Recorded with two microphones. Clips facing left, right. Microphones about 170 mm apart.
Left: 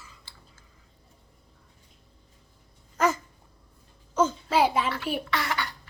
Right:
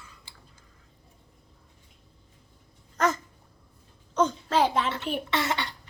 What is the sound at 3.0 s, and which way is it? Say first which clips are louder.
Dog: left 1 dB; 10° left (ahead or behind).